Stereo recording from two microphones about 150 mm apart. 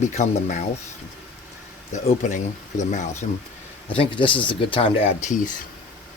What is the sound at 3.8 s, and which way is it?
Speech, 35° left (ahead or behind).